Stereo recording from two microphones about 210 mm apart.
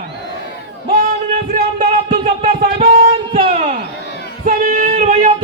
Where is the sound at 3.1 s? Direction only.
25° right (ahead or behind).